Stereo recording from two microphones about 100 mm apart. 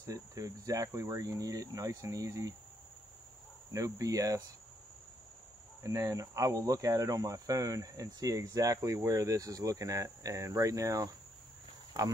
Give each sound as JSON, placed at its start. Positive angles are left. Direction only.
{"t": 0.0, "sound": "speech", "side_deg": -30}
{"t": 3.7, "sound": "speech", "side_deg": -35}
{"t": 5.9, "sound": "speech", "side_deg": -35}